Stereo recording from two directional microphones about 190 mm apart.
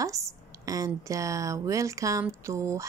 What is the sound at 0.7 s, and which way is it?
A woman's voice, 20° right (ahead or behind).